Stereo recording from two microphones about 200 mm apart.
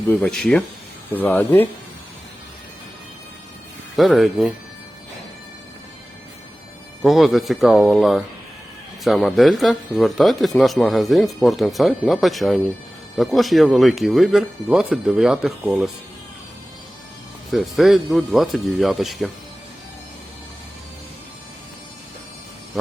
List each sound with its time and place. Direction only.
0.1 s speech: 5° left (ahead or behind)
3.9 s speech: centre (ahead or behind)
7.0 s speech: centre (ahead or behind)
17.5 s speech: centre (ahead or behind)